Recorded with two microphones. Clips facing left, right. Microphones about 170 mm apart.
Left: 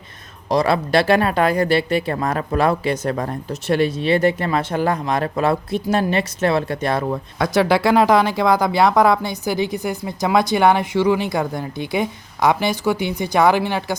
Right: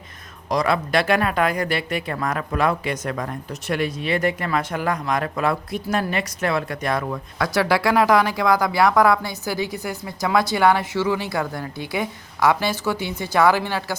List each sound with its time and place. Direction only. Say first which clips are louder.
0.5 s speech: left 4 dB; 30° left (ahead or behind)